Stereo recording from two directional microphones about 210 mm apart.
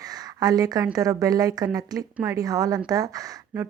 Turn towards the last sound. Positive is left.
turn(degrees=-15)  # may be behind; listen again after turning